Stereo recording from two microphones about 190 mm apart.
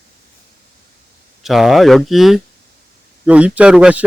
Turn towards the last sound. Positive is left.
turn(degrees=-5)  # may be behind; listen again after turning